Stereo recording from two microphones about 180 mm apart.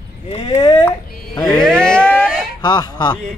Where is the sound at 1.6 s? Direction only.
5° left (ahead or behind).